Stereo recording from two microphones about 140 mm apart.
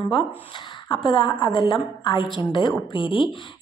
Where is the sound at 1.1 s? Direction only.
35° left (ahead or behind).